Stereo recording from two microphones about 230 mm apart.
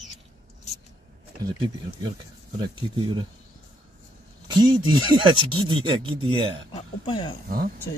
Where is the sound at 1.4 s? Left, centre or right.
Centre.